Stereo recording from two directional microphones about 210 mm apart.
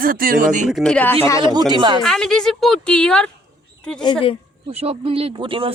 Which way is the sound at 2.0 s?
5° left (ahead or behind).